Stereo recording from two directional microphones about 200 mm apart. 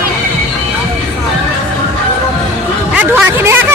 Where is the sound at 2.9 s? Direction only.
10° right (ahead or behind).